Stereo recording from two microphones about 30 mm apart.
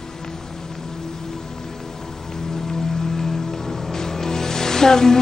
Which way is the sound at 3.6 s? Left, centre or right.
Centre.